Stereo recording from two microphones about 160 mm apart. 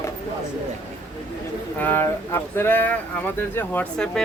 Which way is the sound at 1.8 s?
10° left (ahead or behind).